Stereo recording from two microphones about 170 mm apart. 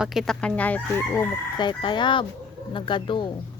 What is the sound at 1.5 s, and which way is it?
Speech, 25° left (ahead or behind).